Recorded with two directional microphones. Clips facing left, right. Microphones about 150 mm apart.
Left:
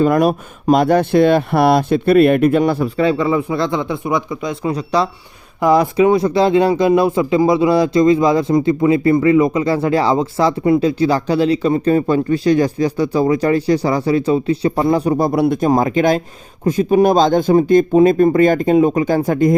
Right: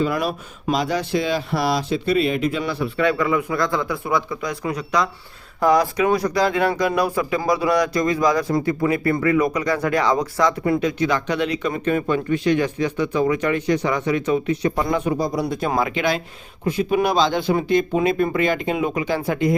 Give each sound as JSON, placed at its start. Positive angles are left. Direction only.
{"t": 0.0, "sound": "speech", "side_deg": 50}
{"t": 3.0, "sound": "speech", "side_deg": 30}
{"t": 5.5, "sound": "speech", "side_deg": 20}
{"t": 15.2, "sound": "speech", "side_deg": 60}
{"t": 15.6, "sound": "speech", "side_deg": 40}